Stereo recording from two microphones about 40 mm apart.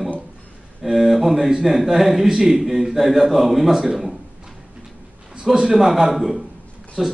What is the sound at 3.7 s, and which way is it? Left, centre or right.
Speech, centre.